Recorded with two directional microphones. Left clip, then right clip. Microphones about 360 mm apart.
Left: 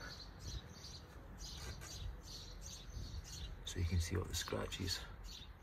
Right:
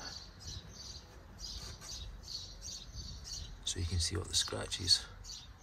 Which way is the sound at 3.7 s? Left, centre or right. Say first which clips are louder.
Right 4 dB; centre.